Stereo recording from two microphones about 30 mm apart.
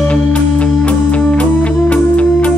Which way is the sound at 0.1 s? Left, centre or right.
Left.